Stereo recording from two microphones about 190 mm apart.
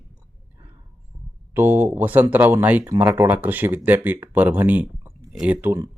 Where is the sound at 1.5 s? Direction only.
10° right (ahead or behind).